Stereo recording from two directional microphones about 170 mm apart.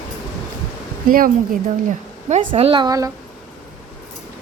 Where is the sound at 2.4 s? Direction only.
30° right (ahead or behind).